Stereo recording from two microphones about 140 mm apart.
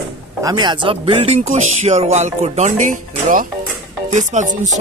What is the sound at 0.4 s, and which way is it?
Speech, 30° right (ahead or behind).